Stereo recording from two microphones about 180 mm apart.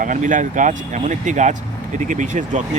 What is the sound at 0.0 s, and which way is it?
Speech, 45° right (ahead or behind).